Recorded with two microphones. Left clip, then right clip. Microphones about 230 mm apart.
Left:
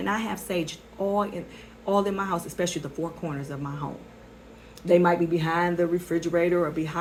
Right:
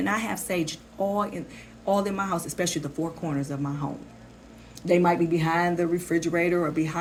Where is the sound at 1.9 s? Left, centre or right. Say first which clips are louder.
Even; right.